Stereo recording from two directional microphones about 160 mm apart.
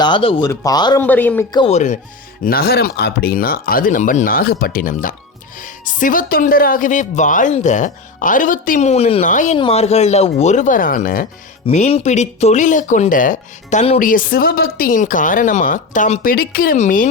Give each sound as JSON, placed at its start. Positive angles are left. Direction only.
{"t": 0.0, "sound": "speech", "side_deg": 30}
{"t": 1.0, "sound": "speech", "side_deg": 10}
{"t": 1.7, "sound": "speech", "side_deg": 45}
{"t": 2.4, "sound": "speech", "side_deg": 70}
{"t": 8.9, "sound": "speech", "side_deg": 40}
{"t": 9.3, "sound": "speech", "side_deg": 50}
{"t": 9.6, "sound": "speech", "side_deg": 40}
{"t": 11.6, "sound": "speech", "side_deg": 40}
{"t": 14.0, "sound": "speech", "side_deg": 60}
{"t": 16.2, "sound": "speech", "side_deg": 65}
{"t": 16.7, "sound": "speech", "side_deg": 50}